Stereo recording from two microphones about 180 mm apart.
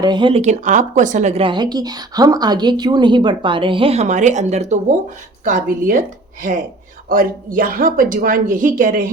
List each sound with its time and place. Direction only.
0.0 s speech: 25° right (ahead or behind); by 6.0 s 45° right (ahead or behind)
7.1 s speech: 50° right (ahead or behind)